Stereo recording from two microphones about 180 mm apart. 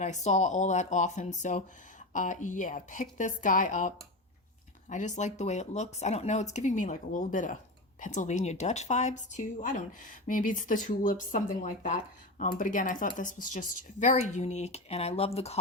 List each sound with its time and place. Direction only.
0.0 s speech: 40° left (ahead or behind)